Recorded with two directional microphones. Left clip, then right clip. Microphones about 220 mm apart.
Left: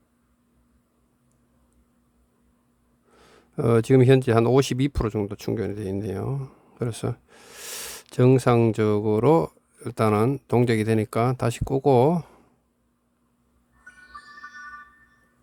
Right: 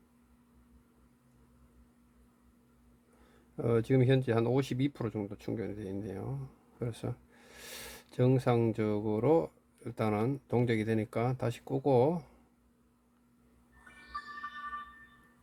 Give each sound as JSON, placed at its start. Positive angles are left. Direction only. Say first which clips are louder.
{"t": 3.6, "sound": "speech", "louder": "left 10 dB", "side_deg": 45}
{"t": 13.8, "sound": "music", "louder": "even", "side_deg": 10}